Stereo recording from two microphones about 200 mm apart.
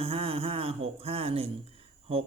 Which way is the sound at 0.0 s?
30° right (ahead or behind).